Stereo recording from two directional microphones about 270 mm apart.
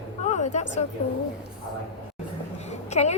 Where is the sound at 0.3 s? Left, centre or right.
Left.